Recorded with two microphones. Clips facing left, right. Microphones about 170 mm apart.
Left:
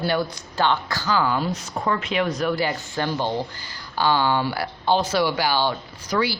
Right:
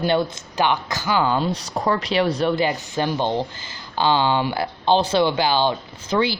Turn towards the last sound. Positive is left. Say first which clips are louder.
# right 3 dB
turn(degrees=-25)  # may be behind; listen again after turning